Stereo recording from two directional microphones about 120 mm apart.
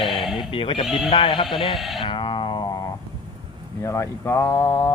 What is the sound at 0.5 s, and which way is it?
Speech, 50° left (ahead or behind).